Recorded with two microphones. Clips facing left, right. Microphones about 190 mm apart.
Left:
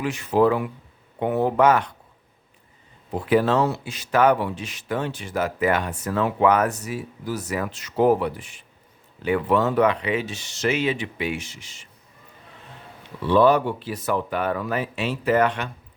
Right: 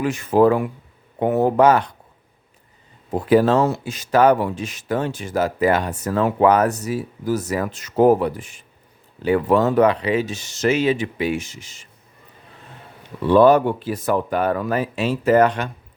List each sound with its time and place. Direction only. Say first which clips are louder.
0.0 s speech: right 4 dB; 45° right (ahead or behind)
3.1 s speech: right 4 dB; 40° right (ahead or behind)
13.2 s speech: right 4 dB; 50° right (ahead or behind)